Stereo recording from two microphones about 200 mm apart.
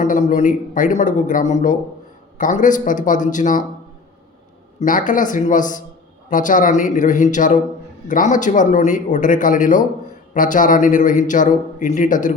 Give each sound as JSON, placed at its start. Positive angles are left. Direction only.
{"t": 0.0, "sound": "a man's voice", "side_deg": 40}
{"t": 4.8, "sound": "a man's voice", "side_deg": 40}